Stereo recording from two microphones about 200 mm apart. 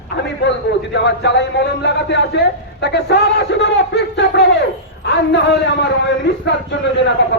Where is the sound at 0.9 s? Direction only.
60° left (ahead or behind).